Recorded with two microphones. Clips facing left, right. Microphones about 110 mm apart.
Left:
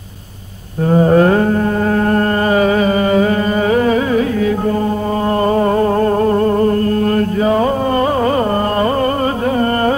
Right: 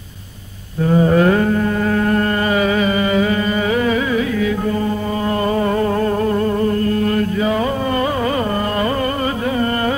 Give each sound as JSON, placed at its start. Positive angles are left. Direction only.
{"t": 0.8, "sound": "mantra", "side_deg": 40}
{"t": 5.4, "sound": "music", "side_deg": 40}